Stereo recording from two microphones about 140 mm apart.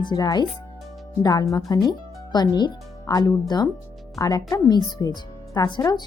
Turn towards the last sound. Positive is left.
turn(degrees=30)  # may be behind; listen again after turning